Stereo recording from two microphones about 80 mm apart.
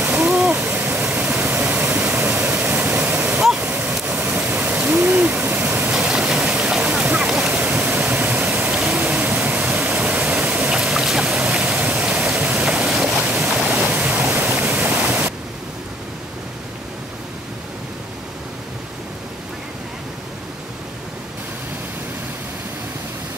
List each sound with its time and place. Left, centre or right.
0.0 s waterfall: centre
3.3 s a sound: centre
5.9 s waterfall: centre
7.5 s waterfall: centre
13.6 s stream: centre